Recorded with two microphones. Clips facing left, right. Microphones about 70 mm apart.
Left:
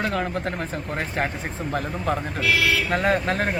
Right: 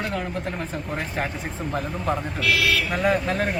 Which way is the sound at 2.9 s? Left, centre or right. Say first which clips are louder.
Left 1 dB; left.